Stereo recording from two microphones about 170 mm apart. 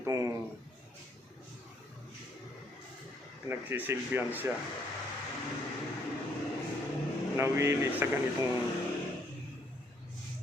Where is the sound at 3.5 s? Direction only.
10° right (ahead or behind).